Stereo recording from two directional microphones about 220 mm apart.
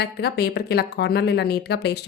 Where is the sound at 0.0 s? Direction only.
45° left (ahead or behind).